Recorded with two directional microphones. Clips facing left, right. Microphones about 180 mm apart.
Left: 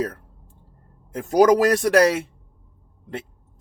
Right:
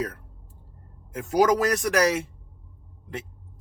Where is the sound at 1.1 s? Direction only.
40° left (ahead or behind).